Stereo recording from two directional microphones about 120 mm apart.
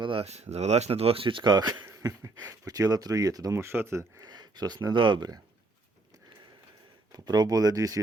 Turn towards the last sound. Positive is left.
turn(degrees=-30)  # may be behind; listen again after turning